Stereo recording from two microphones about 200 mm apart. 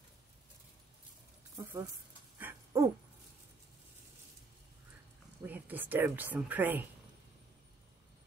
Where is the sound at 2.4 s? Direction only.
10° right (ahead or behind).